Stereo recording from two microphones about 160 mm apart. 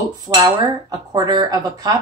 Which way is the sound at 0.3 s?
25° right (ahead or behind).